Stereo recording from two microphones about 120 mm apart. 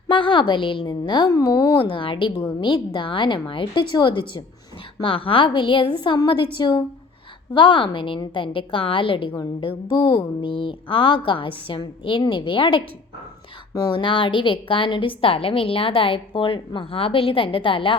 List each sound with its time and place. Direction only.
0.1 s a woman's voice: 45° left (ahead or behind)
13.9 s a woman's voice: 45° left (ahead or behind)